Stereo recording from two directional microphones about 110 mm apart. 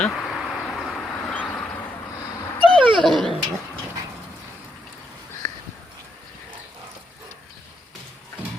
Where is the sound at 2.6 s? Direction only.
50° right (ahead or behind).